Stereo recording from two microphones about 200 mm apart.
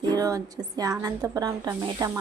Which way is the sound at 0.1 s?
15° right (ahead or behind).